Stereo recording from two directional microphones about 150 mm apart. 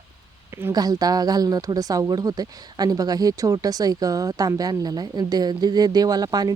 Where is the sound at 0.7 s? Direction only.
25° right (ahead or behind).